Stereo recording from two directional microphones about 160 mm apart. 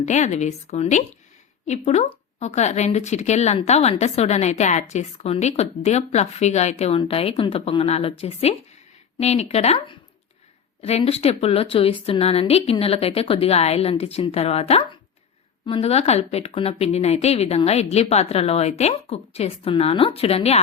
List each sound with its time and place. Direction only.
0.0 s speech: 45° left (ahead or behind)